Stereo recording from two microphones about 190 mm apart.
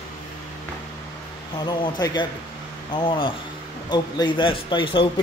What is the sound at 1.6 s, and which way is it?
Speech, 25° left (ahead or behind).